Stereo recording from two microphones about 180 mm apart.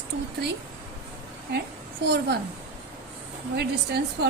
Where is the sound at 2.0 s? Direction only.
70° right (ahead or behind).